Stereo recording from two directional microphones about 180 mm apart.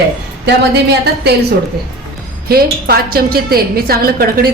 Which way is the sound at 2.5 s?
60° right (ahead or behind).